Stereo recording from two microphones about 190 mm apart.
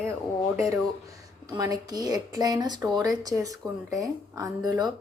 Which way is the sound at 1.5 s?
20° right (ahead or behind).